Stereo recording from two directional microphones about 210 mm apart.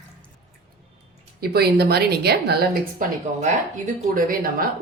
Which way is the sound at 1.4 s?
50° right (ahead or behind).